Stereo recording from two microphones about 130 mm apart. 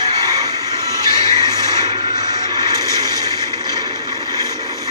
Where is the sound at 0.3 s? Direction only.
30° right (ahead or behind).